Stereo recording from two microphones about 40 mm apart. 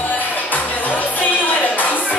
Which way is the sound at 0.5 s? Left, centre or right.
Left.